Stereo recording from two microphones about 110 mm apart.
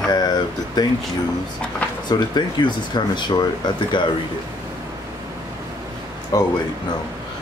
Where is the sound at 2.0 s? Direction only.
40° left (ahead or behind).